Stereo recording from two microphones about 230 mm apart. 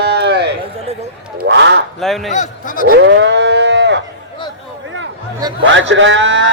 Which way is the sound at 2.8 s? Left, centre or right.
Right.